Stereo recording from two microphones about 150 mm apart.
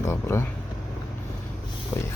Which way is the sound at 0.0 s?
15° left (ahead or behind).